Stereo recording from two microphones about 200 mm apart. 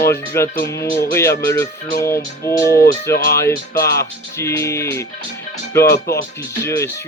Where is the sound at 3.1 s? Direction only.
50° left (ahead or behind).